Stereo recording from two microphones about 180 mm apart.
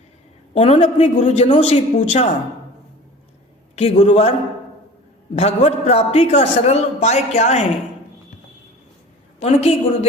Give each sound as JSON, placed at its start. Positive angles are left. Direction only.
{"t": 0.5, "sound": "a man's voice", "side_deg": 35}
{"t": 3.8, "sound": "a man's voice", "side_deg": 35}
{"t": 5.3, "sound": "a man's voice", "side_deg": 35}
{"t": 9.4, "sound": "a man's voice", "side_deg": 35}